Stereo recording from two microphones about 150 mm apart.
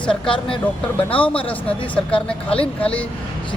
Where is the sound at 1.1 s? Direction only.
35° left (ahead or behind).